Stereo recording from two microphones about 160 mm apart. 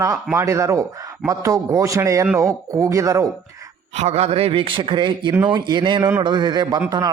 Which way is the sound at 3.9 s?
40° right (ahead or behind).